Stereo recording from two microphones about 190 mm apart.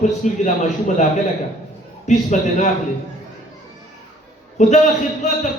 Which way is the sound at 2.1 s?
40° left (ahead or behind).